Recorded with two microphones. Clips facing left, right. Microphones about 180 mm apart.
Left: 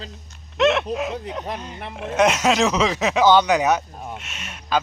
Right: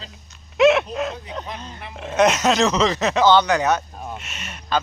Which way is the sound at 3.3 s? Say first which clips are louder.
Left 1 dB; 15° left (ahead or behind).